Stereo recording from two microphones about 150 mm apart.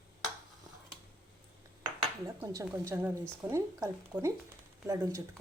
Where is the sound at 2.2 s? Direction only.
20° right (ahead or behind).